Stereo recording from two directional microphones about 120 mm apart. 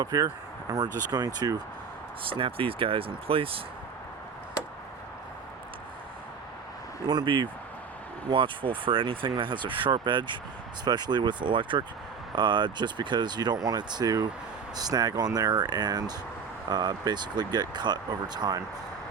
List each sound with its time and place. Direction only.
0.0 s speech: 30° right (ahead or behind)
2.3 s speech: 50° right (ahead or behind)
7.1 s speech: 40° right (ahead or behind)